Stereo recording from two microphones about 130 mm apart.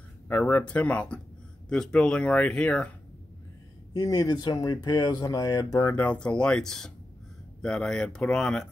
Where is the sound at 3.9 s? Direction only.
30° left (ahead or behind).